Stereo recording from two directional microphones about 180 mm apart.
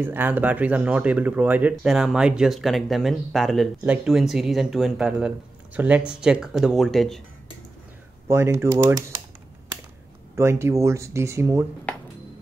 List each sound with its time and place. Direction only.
0.0 s speech: 10° right (ahead or behind)
8.3 s speech: 15° right (ahead or behind)
10.3 s speech: 15° right (ahead or behind)